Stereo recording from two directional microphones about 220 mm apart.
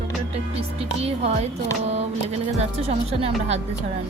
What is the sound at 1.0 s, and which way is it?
Music, 25° right (ahead or behind).